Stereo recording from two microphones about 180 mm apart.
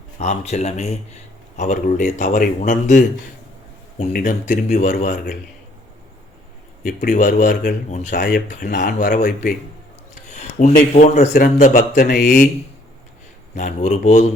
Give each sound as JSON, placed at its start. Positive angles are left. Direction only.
{"t": 0.2, "sound": "speech", "side_deg": 40}
{"t": 4.1, "sound": "speech", "side_deg": 45}
{"t": 6.8, "sound": "speech", "side_deg": 50}
{"t": 11.9, "sound": "speech", "side_deg": 55}
{"t": 13.6, "sound": "speech", "side_deg": 45}